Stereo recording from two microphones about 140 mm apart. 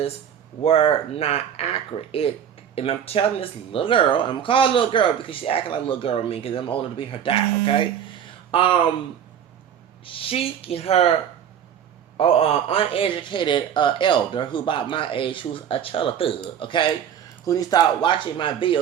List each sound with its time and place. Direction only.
0.6 s speech: 45° left (ahead or behind)
8.4 s a sound: 40° left (ahead or behind)
10.1 s speech: 40° left (ahead or behind)
12.1 s speech: 45° left (ahead or behind)
17.4 s speech: 25° left (ahead or behind)